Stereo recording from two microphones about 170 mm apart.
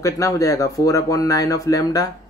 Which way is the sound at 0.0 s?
20° left (ahead or behind).